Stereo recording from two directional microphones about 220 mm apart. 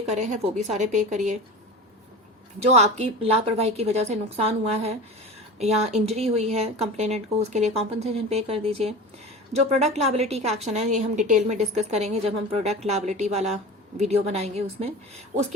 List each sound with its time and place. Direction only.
0.1 s a woman's voice: 30° right (ahead or behind)
2.6 s a woman's voice: 30° right (ahead or behind)